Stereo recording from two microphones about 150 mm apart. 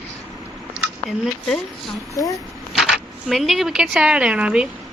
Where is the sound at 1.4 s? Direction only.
5° left (ahead or behind).